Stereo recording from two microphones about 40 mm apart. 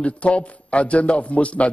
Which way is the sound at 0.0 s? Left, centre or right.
Left.